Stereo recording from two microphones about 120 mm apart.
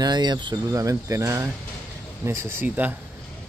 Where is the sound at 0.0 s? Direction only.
35° right (ahead or behind).